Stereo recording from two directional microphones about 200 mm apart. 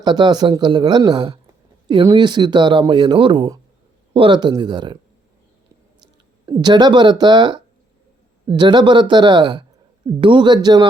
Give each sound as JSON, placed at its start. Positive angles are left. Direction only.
{"t": 0.0, "sound": "speech", "side_deg": -20}
{"t": 6.4, "sound": "speech", "side_deg": -20}